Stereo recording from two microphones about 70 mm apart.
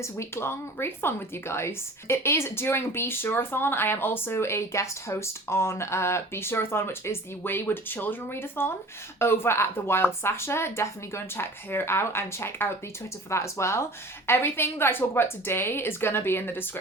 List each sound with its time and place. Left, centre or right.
0.0 s speech: left